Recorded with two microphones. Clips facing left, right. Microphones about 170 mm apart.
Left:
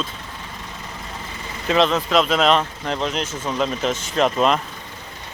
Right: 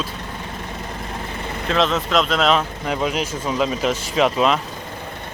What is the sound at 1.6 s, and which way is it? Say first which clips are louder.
Speech: left 2 dB; centre (ahead or behind).